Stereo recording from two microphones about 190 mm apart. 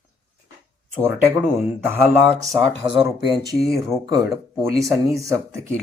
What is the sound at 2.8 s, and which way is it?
A man's voice, 20° right (ahead or behind).